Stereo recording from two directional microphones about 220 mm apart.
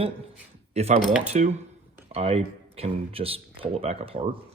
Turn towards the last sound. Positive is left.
turn(degrees=-25)  # may be behind; listen again after turning